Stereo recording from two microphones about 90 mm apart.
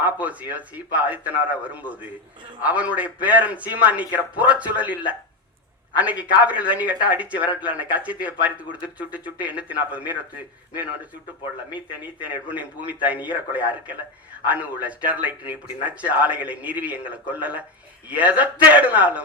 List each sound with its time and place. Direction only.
0.0 s speech: 15° right (ahead or behind)
12.2 s speech: 15° right (ahead or behind)